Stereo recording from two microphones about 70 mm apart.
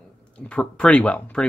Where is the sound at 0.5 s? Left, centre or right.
Centre.